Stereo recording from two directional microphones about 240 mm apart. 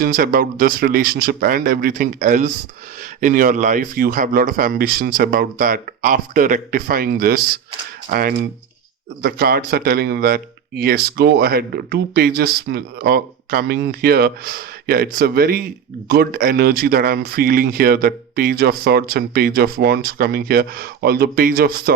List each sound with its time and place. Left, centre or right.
0.0 s speech: right